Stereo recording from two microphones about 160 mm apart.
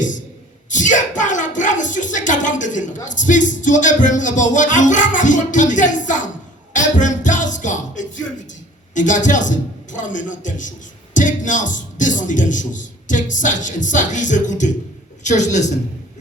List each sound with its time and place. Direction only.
0.7 s a man's voice: 50° left (ahead or behind)
6.7 s music: 50° left (ahead or behind)
9.0 s a man's voice: 50° left (ahead or behind)